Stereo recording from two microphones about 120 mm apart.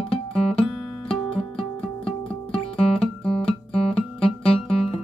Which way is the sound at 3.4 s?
55° left (ahead or behind).